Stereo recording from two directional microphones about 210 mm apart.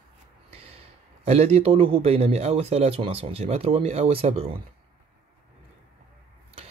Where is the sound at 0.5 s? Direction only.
25° right (ahead or behind).